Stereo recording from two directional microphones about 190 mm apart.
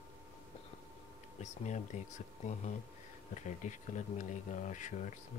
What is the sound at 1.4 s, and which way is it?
Speech, 40° left (ahead or behind).